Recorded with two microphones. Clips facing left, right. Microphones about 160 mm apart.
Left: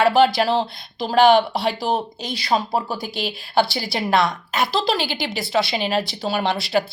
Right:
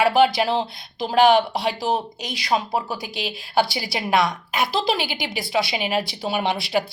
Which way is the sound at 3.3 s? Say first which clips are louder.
Left 1 dB; 10° right (ahead or behind).